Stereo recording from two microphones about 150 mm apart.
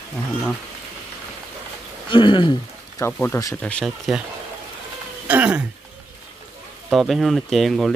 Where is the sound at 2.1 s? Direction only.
35° left (ahead or behind).